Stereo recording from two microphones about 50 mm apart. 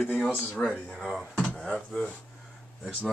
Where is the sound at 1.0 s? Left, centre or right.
Centre.